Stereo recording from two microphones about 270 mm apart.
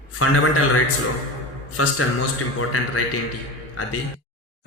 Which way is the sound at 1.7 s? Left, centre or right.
Left.